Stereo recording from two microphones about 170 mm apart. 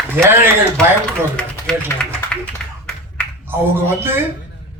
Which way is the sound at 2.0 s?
5° left (ahead or behind).